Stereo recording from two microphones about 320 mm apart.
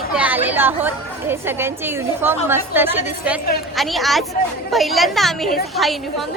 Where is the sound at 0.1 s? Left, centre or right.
Centre.